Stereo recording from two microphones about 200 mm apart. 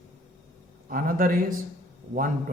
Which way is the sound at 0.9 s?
45° right (ahead or behind).